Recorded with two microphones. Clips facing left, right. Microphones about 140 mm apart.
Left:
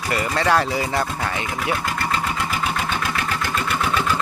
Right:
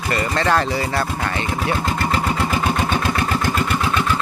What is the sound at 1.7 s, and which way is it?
Vehicle, 25° right (ahead or behind).